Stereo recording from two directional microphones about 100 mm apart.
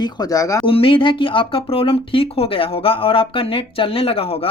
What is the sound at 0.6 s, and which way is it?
Speech, 65° left (ahead or behind).